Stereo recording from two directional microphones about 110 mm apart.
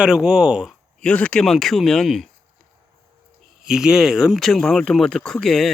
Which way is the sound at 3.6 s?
5° right (ahead or behind).